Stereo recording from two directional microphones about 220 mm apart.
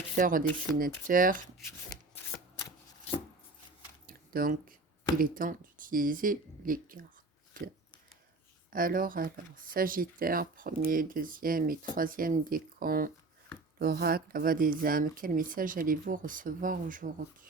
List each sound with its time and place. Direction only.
0.2 s speech: 40° right (ahead or behind)
4.0 s a sound: 40° right (ahead or behind)
5.1 s speech: 40° right (ahead or behind)
8.7 s speech: 40° right (ahead or behind)